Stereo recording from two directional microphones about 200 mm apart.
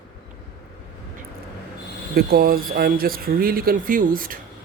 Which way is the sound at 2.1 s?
50° right (ahead or behind).